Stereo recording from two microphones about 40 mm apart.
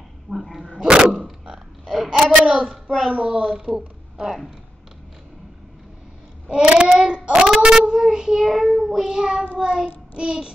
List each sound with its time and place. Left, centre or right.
0.3 s dog: centre
0.6 s dog: right
1.4 s a sound: centre
3.1 s child singing: right
6.5 s child singing: right